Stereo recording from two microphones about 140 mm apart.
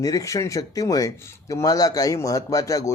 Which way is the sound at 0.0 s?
25° left (ahead or behind).